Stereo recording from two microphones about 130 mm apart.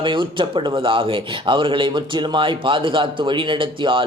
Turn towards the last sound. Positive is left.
turn(degrees=-40)  # may be behind; listen again after turning